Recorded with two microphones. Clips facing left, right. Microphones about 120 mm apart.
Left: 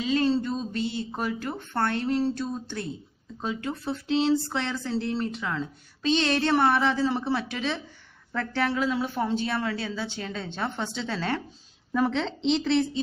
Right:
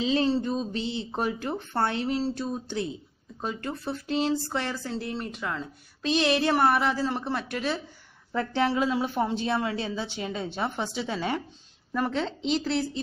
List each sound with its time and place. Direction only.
0.0 s a woman's voice: 20° right (ahead or behind)
3.3 s speech: centre (ahead or behind)
8.3 s a woman's voice: 15° right (ahead or behind)
11.9 s speech: 5° right (ahead or behind)